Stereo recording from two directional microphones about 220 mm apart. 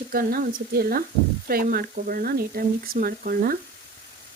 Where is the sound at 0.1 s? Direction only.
40° right (ahead or behind).